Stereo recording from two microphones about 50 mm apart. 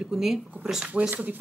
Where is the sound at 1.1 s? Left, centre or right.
Right.